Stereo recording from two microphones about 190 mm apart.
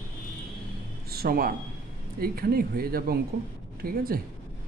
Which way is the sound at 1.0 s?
50° right (ahead or behind).